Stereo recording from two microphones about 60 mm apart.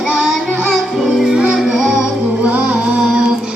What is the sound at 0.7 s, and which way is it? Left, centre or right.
Music, centre.